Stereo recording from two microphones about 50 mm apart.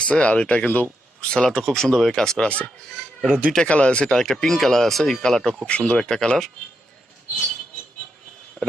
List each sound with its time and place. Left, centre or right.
0.0 s speech: left
1.2 s speech: centre
3.2 s speech: right
3.7 s speech: left
4.1 s speech: centre
5.6 s speech: left
6.0 s speech: centre
8.6 s a sound: left